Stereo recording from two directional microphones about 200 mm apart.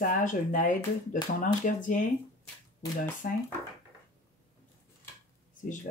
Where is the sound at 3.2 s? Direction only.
45° left (ahead or behind).